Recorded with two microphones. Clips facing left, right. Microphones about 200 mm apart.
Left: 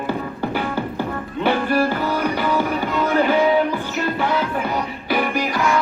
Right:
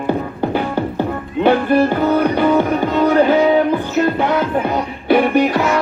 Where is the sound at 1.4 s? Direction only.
20° right (ahead or behind).